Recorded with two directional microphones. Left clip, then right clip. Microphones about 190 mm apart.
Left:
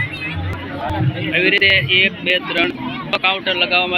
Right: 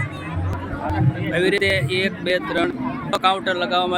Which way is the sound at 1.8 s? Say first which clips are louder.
Left 8 dB; 65° right (ahead or behind).